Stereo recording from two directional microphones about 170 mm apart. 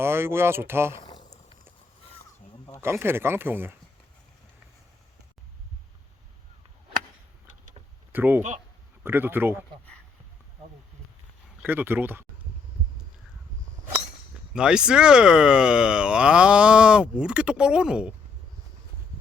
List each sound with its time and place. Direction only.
0.0 s speech: 15° right (ahead or behind)
2.8 s speech: 15° right (ahead or behind)
8.1 s speech: 10° right (ahead or behind)
8.4 s speech: 45° right (ahead or behind)
9.0 s speech: 15° right (ahead or behind)
11.6 s speech: 10° right (ahead or behind)
14.5 s speech: 5° right (ahead or behind)